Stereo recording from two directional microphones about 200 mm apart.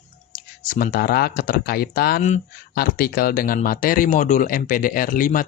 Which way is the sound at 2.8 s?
45° left (ahead or behind).